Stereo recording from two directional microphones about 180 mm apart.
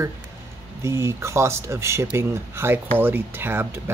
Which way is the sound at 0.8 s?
15° right (ahead or behind).